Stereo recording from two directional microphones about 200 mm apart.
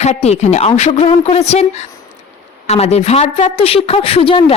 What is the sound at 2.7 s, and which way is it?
Speech, 30° left (ahead or behind).